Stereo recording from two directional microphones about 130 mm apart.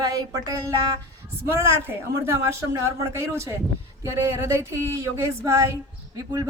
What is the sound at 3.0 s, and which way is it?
A woman's voice, 20° right (ahead or behind).